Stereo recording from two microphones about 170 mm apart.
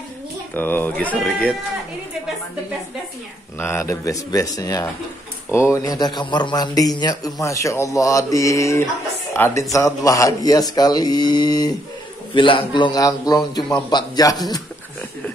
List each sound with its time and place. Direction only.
0.6 s speech: 10° left (ahead or behind)
3.5 s speech: 15° left (ahead or behind)